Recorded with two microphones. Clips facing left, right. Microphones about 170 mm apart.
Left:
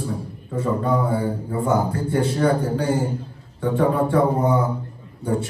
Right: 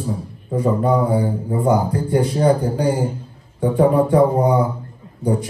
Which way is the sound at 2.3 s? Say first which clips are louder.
Right 3 dB; 25° right (ahead or behind).